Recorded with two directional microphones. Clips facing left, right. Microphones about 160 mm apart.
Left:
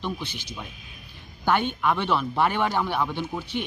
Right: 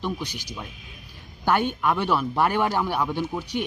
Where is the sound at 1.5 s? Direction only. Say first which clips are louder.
Right 1 dB; 10° right (ahead or behind).